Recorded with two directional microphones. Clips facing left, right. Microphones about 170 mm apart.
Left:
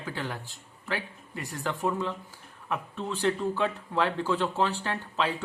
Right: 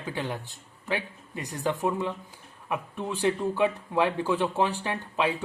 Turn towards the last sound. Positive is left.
turn(degrees=-15)  # may be behind; listen again after turning